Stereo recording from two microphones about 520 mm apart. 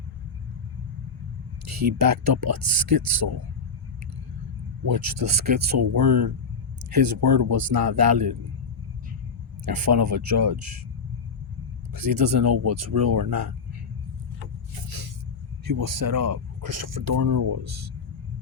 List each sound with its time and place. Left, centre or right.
1.6 s speech: right
4.9 s speech: right
6.9 s speech: right
9.6 s speech: right
11.9 s speech: right
13.1 s speech: right
15.6 s speech: right